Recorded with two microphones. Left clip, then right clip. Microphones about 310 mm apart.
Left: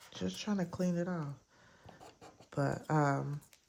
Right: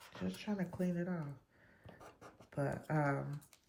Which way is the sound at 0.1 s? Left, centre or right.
Centre.